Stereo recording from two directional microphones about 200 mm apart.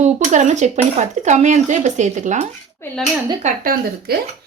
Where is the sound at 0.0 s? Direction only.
35° right (ahead or behind).